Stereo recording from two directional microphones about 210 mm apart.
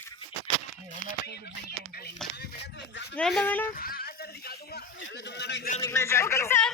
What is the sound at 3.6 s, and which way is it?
A man's voice, 45° left (ahead or behind).